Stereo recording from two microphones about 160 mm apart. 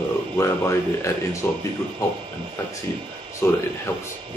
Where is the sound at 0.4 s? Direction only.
15° left (ahead or behind).